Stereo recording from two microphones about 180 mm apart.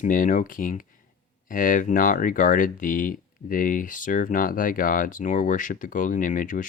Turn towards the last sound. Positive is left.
turn(degrees=45)  # may be behind; listen again after turning